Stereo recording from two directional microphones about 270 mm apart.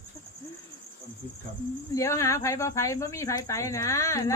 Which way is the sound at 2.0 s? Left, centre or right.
Centre.